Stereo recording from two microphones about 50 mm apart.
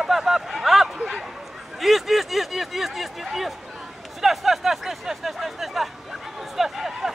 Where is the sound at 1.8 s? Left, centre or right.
Centre.